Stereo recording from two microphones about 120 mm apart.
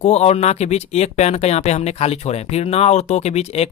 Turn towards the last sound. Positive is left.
turn(degrees=60)  # may be behind; listen again after turning